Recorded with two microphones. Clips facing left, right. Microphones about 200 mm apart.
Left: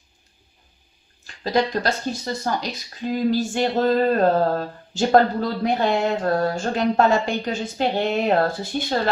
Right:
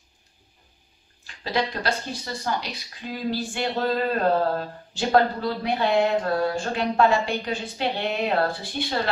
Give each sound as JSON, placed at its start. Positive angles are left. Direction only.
{"t": 1.2, "sound": "speech", "side_deg": 40}